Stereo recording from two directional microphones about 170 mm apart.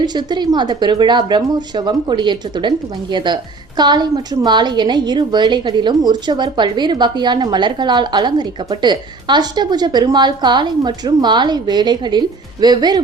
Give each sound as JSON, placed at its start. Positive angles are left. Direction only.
{"t": 0.0, "sound": "a woman's voice", "side_deg": -25}